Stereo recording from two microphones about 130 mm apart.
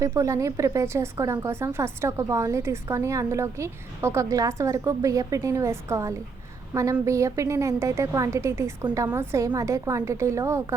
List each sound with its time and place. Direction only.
0.0 s a woman's voice: 25° right (ahead or behind)